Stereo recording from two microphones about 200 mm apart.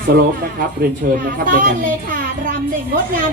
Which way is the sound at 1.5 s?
40° right (ahead or behind).